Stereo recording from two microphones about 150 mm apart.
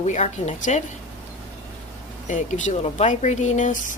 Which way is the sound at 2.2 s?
55° left (ahead or behind).